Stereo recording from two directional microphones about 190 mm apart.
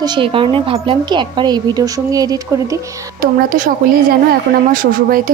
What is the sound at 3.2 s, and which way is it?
A woman's voice, 45° right (ahead or behind).